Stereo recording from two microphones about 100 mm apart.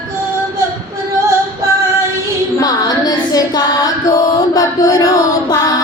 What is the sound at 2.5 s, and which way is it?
Music, 40° left (ahead or behind).